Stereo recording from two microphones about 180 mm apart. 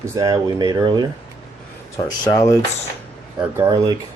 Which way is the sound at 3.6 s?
20° right (ahead or behind).